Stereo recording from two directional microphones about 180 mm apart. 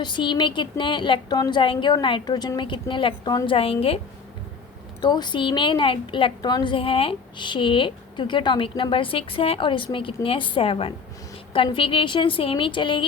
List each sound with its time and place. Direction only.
0.0 s a woman's voice: 25° left (ahead or behind)